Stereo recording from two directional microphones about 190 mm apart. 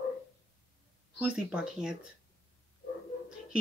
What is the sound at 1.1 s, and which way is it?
Speech, 5° right (ahead or behind).